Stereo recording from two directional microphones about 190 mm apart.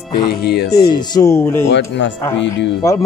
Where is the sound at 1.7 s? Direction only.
65° left (ahead or behind).